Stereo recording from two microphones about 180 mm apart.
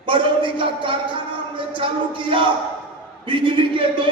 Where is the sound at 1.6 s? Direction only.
30° right (ahead or behind).